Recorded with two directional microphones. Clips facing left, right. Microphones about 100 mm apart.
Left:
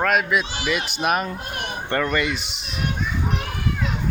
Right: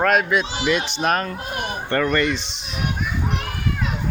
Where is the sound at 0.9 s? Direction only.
10° left (ahead or behind).